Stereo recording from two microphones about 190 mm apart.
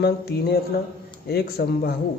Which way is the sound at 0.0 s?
60° left (ahead or behind).